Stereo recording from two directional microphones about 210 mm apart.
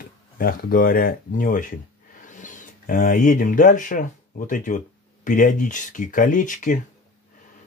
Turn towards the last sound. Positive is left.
turn(degrees=40)  # may be behind; listen again after turning